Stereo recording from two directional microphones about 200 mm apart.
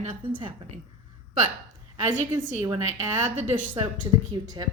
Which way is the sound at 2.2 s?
35° right (ahead or behind).